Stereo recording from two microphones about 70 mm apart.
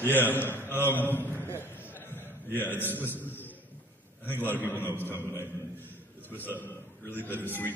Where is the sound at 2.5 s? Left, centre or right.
Right.